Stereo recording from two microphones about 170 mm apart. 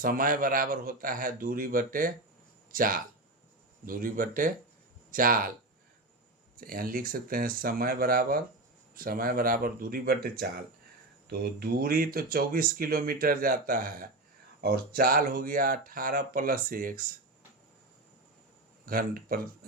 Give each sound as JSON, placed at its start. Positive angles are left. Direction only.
{"t": 0.0, "sound": "speech", "side_deg": -55}
{"t": 6.6, "sound": "speech", "side_deg": -55}
{"t": 18.9, "sound": "speech", "side_deg": -60}